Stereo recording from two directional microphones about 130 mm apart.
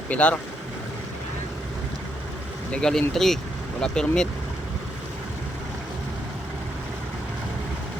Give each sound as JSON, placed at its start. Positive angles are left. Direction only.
{"t": 0.1, "sound": "speech", "side_deg": 10}
{"t": 2.7, "sound": "speech", "side_deg": 5}